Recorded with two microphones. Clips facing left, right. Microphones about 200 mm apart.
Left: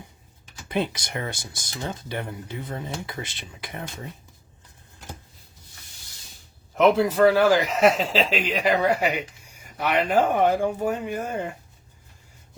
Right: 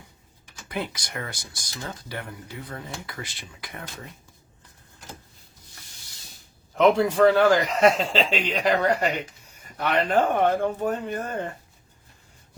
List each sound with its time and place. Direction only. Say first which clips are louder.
0.7 s speech: left 5 dB; 25° left (ahead or behind)
6.7 s a man's voice: even; 5° left (ahead or behind)